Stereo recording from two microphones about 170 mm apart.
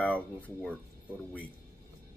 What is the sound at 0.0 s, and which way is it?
Speech, 5° left (ahead or behind).